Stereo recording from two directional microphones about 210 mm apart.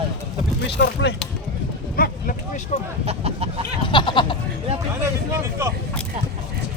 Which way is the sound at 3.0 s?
30° right (ahead or behind).